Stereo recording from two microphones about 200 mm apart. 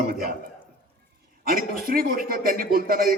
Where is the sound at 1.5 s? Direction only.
45° right (ahead or behind).